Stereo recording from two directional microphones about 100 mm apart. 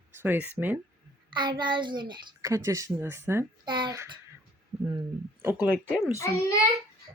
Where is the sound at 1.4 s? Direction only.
50° right (ahead or behind).